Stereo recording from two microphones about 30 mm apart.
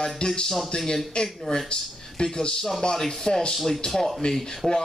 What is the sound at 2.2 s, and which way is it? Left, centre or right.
Speech, left.